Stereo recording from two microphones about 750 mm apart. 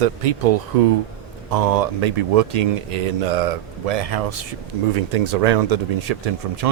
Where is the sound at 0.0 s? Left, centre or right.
Right.